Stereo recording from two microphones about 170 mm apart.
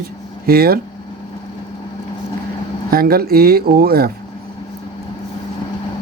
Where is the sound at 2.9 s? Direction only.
60° right (ahead or behind).